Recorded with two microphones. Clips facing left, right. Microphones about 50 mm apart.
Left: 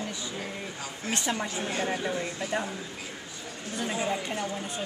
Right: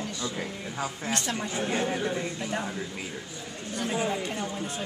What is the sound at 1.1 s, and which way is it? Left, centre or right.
Speech, centre.